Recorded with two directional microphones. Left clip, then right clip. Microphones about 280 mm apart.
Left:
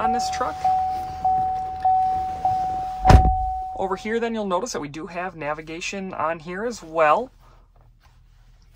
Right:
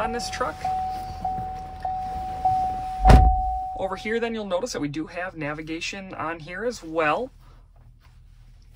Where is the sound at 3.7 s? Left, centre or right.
Left.